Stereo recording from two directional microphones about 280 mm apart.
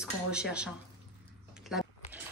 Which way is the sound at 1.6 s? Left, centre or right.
Centre.